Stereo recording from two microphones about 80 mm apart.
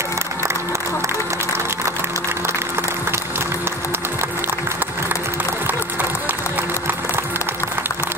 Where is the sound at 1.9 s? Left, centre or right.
Right.